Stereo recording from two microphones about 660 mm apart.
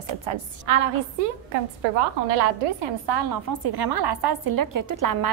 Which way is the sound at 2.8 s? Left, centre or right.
Right.